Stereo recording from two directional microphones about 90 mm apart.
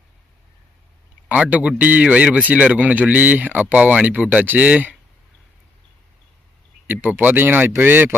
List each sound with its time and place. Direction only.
1.3 s a man's voice: 15° right (ahead or behind)
6.8 s speech: 20° right (ahead or behind)